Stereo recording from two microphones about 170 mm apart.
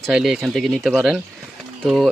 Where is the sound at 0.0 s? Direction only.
Centre (ahead or behind).